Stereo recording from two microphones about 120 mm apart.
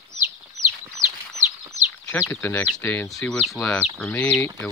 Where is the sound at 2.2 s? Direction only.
20° left (ahead or behind).